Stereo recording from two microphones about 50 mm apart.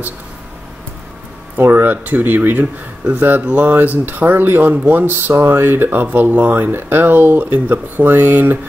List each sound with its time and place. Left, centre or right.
1.6 s speech: right
3.4 s speech: right
5.9 s speech: right